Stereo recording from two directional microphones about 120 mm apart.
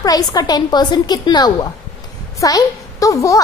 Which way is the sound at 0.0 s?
30° left (ahead or behind).